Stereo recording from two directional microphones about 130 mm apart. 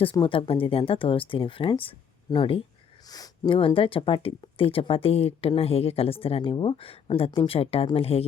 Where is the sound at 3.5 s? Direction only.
45° left (ahead or behind).